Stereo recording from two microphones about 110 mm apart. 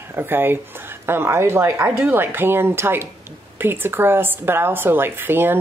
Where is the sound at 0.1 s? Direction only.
20° right (ahead or behind).